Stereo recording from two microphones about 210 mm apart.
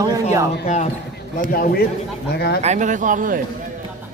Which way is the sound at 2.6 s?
35° right (ahead or behind).